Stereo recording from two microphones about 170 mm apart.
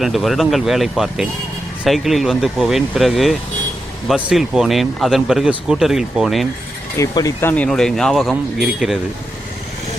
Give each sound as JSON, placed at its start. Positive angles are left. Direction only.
{"t": 0.0, "sound": "speech", "side_deg": 0}
{"t": 6.9, "sound": "speech", "side_deg": 20}
{"t": 7.5, "sound": "speech", "side_deg": 5}